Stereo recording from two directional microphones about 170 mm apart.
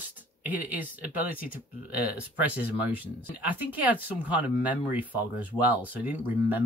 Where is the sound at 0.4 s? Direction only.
10° right (ahead or behind).